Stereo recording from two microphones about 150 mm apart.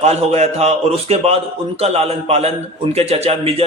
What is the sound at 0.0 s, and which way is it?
A man's voice, 45° right (ahead or behind).